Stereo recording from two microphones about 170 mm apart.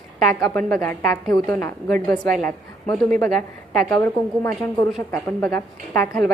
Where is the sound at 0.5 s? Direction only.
5° left (ahead or behind).